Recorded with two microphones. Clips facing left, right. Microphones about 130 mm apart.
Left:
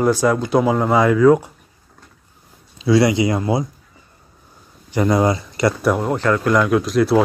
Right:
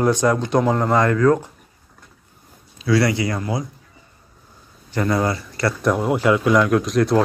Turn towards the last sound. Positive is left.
turn(degrees=5)  # may be behind; listen again after turning